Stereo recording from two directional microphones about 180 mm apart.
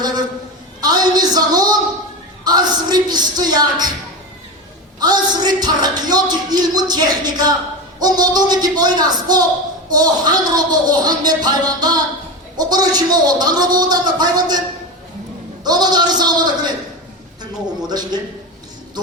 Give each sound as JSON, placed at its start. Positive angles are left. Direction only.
{"t": 0.0, "sound": "a sound", "side_deg": -20}
{"t": 2.4, "sound": "speech", "side_deg": -20}
{"t": 4.9, "sound": "a man's voice", "side_deg": -20}
{"t": 15.6, "sound": "a man's voice", "side_deg": -20}
{"t": 17.8, "sound": "a man's voice", "side_deg": -25}